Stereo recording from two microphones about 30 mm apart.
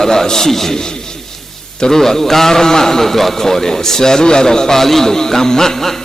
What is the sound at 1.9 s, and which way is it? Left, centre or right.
A man's voice, centre.